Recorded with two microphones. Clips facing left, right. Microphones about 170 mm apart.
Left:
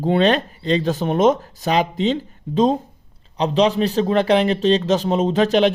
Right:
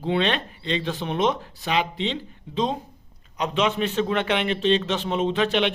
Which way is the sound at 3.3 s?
35° left (ahead or behind).